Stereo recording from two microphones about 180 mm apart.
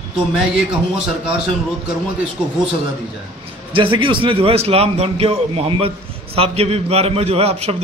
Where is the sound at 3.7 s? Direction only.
30° right (ahead or behind).